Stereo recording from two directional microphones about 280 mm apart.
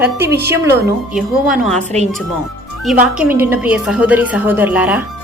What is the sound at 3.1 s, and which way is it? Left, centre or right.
A woman's voice, centre.